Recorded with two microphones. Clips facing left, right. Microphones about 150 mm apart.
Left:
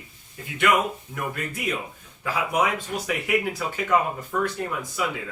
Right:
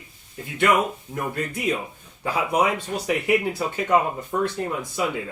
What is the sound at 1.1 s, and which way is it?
Speech, 40° right (ahead or behind).